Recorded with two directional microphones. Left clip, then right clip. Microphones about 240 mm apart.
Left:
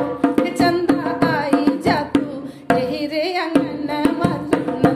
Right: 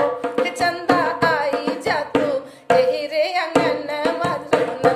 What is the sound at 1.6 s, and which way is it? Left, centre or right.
Carnatic music, centre.